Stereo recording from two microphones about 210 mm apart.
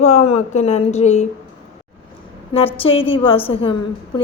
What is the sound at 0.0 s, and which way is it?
Speech, 30° left (ahead or behind).